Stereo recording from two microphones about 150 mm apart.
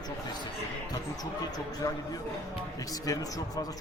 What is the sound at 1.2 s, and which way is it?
A man's voice, 25° left (ahead or behind).